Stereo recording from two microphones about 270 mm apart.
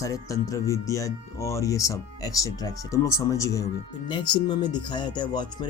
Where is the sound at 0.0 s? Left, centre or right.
Centre.